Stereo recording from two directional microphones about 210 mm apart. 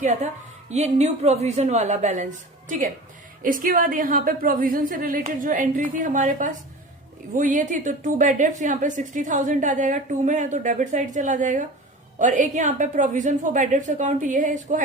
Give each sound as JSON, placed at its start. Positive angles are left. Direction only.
{"t": 0.0, "sound": "a woman's voice", "side_deg": -35}